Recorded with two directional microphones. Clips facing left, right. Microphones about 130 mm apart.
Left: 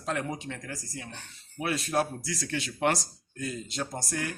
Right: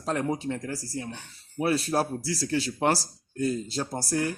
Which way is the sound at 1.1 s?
15° right (ahead or behind).